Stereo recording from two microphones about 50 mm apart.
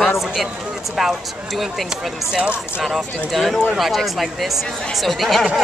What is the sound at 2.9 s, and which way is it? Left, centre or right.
Speech, centre.